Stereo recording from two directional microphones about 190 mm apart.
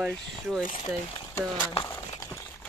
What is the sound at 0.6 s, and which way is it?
Speech, 45° left (ahead or behind).